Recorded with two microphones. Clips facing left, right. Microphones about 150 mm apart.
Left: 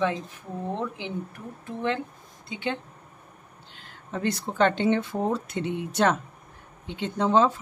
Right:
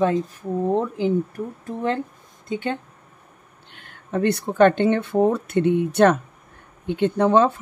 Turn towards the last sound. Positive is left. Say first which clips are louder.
# right 4 dB
turn(degrees=-60)  # may be behind; listen again after turning